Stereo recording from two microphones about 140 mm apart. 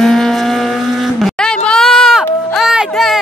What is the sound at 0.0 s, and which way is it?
Vehicle, 5° left (ahead or behind).